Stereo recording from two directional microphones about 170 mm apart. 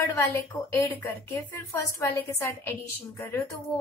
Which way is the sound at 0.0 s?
15° left (ahead or behind).